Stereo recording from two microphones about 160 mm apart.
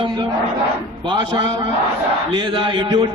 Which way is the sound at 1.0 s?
30° right (ahead or behind).